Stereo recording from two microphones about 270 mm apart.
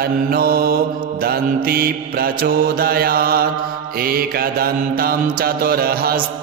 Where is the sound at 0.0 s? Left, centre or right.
Right.